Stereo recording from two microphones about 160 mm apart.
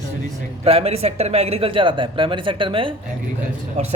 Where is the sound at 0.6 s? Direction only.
40° right (ahead or behind).